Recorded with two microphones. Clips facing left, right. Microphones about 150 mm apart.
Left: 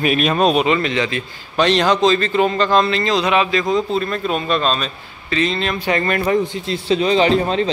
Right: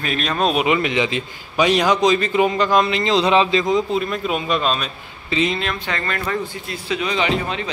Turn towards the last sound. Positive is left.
turn(degrees=35)  # may be behind; listen again after turning